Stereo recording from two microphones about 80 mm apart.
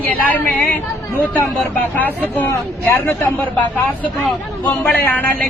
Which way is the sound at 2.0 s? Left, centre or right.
Left.